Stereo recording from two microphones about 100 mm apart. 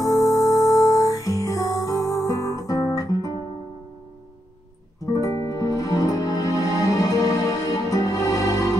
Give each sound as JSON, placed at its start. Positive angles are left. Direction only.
{"t": 0.0, "sound": "music", "side_deg": 35}
{"t": 5.0, "sound": "music", "side_deg": 35}